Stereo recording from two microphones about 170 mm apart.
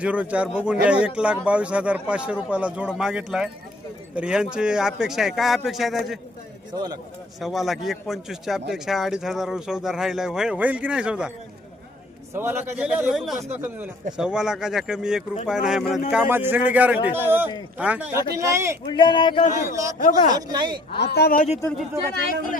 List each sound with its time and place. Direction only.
0.0 s a man's voice: 10° right (ahead or behind)
6.7 s speech: 20° right (ahead or behind)
7.3 s speech: centre (ahead or behind)
12.3 s a man's voice: 10° right (ahead or behind)
18.9 s speech: 30° left (ahead or behind)
19.5 s speech: 20° right (ahead or behind)
20.0 s speech: 50° left (ahead or behind)
20.3 s speech: 25° right (ahead or behind)
21.0 s speech: 70° left (ahead or behind)